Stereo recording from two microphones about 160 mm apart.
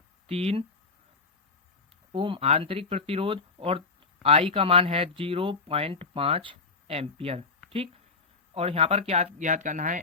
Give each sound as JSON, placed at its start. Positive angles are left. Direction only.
{"t": 0.3, "sound": "speech", "side_deg": -40}
{"t": 2.1, "sound": "speech", "side_deg": -35}